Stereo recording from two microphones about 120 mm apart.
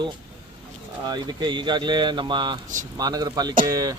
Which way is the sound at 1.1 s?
35° right (ahead or behind).